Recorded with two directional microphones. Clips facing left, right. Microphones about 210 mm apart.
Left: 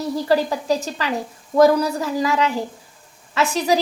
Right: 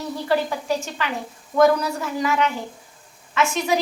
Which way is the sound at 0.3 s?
35° left (ahead or behind).